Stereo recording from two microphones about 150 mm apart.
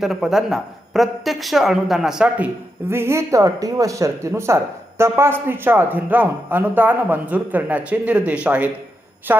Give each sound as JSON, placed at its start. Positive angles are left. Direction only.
{"t": 0.0, "sound": "a woman's voice", "side_deg": 0}
{"t": 2.9, "sound": "speech", "side_deg": -15}
{"t": 9.3, "sound": "a sound", "side_deg": -15}